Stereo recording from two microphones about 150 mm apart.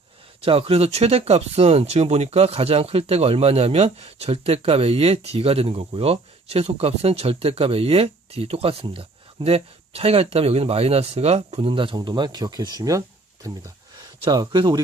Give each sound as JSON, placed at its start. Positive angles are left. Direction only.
{"t": 0.4, "sound": "speech", "side_deg": -40}
{"t": 14.3, "sound": "speech", "side_deg": -30}